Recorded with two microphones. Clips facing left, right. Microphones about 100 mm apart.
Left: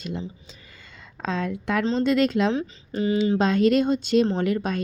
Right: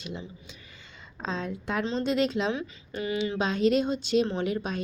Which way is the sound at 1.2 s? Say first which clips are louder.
Left 5 dB; 65° left (ahead or behind).